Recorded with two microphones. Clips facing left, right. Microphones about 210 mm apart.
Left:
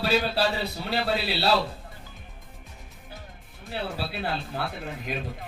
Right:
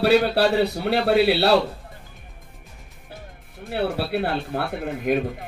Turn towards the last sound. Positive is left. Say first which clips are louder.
# right 10 dB
turn(degrees=-55)  # may be behind; listen again after turning